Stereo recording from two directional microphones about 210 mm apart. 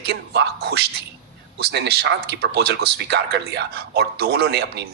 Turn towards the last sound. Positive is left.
turn(degrees=-50)  # may be behind; listen again after turning